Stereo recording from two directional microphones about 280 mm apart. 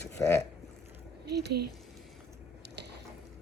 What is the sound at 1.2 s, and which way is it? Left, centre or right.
Speech, right.